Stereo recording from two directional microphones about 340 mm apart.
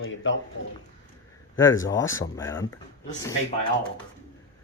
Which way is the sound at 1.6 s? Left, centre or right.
Centre.